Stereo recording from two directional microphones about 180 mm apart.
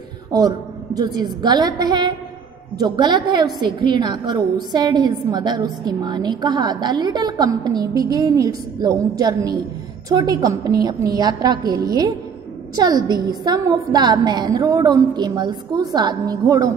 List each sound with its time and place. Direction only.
0.3 s a woman's voice: 20° right (ahead or behind)